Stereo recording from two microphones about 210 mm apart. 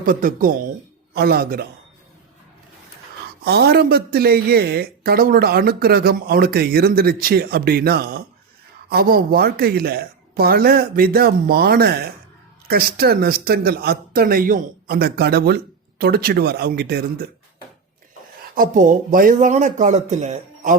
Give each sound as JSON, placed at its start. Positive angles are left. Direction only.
{"t": 0.0, "sound": "speech", "side_deg": -40}
{"t": 3.4, "sound": "speech", "side_deg": -50}
{"t": 18.5, "sound": "speech", "side_deg": -40}